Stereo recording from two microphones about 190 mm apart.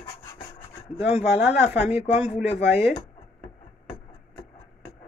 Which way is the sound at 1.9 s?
35° left (ahead or behind).